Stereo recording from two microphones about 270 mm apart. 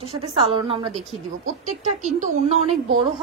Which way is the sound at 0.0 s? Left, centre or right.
Right.